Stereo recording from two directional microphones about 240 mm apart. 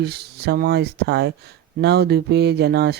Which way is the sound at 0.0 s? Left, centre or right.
Right.